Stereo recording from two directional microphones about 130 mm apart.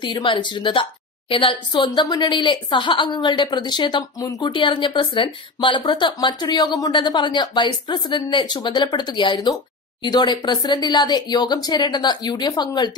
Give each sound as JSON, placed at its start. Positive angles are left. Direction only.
{"t": 0.0, "sound": "a woman's voice", "side_deg": 35}
{"t": 1.9, "sound": "speech", "side_deg": 30}